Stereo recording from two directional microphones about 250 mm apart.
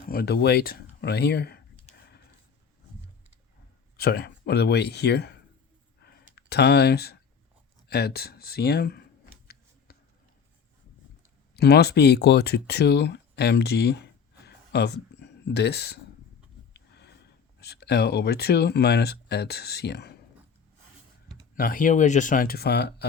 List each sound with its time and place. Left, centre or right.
0.1 s a sound: left
3.9 s speech: left
6.0 s a sound: left
7.9 s speech: left
9.5 s a sound: left
11.5 s speech: left
16.7 s sniff: left
17.6 s speech: left
21.5 s speech: left